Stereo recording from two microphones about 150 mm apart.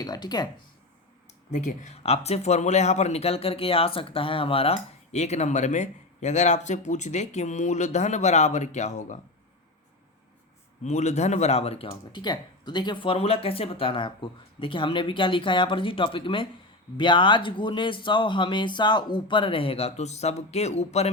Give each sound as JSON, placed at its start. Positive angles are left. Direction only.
{"t": 0.0, "sound": "speech", "side_deg": 25}
{"t": 1.5, "sound": "speech", "side_deg": 55}
{"t": 10.8, "sound": "speech", "side_deg": 50}